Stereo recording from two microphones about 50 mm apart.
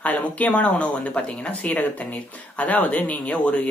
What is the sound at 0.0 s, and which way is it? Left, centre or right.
Speech, left.